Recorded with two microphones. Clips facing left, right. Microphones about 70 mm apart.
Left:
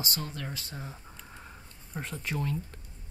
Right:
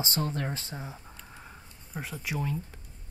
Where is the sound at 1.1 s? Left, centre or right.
Centre.